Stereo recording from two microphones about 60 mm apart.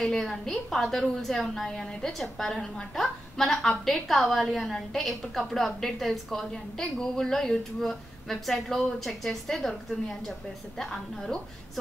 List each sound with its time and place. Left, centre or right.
0.0 s a woman's voice: centre